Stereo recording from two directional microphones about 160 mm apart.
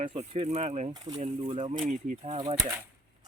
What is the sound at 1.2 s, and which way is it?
Speech, 35° right (ahead or behind).